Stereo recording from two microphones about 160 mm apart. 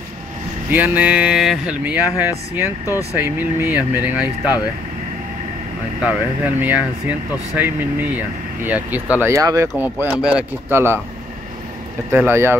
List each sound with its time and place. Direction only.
0.7 s speech: 10° right (ahead or behind)
2.9 s speech: 20° left (ahead or behind)
3.3 s speech: 10° right (ahead or behind)
6.0 s speech: 10° right (ahead or behind)
12.1 s speech: 15° right (ahead or behind)